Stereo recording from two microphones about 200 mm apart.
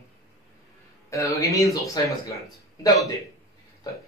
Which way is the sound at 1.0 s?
15° left (ahead or behind).